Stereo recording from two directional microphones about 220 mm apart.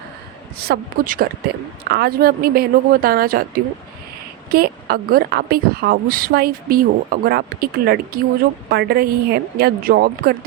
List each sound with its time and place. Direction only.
0.6 s a woman's voice: 40° right (ahead or behind)
4.4 s a woman's voice: 45° right (ahead or behind)